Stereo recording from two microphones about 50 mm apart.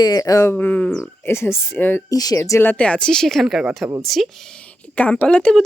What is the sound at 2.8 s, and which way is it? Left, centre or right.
Speech, left.